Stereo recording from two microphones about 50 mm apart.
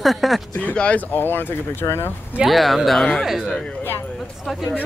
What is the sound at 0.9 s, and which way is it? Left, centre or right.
Speech, left.